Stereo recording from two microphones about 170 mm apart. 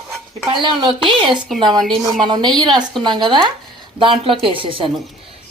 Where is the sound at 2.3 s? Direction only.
25° right (ahead or behind).